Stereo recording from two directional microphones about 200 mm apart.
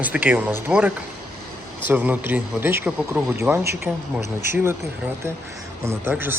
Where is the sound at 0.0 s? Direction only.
10° right (ahead or behind).